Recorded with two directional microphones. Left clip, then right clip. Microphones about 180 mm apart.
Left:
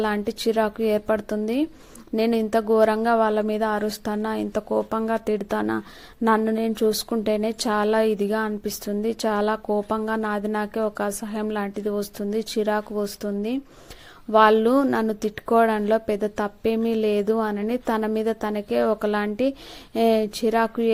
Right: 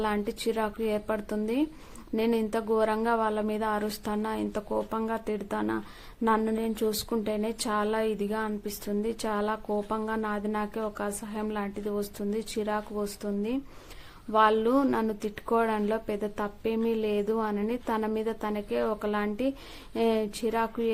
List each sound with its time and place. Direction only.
0.0 s speech: 25° left (ahead or behind)